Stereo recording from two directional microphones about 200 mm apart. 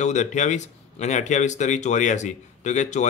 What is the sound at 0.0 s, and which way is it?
Speech, 35° left (ahead or behind).